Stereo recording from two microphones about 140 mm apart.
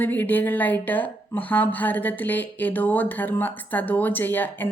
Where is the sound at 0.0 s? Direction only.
15° left (ahead or behind).